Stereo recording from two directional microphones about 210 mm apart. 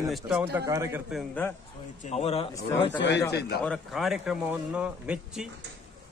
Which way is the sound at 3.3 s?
50° left (ahead or behind).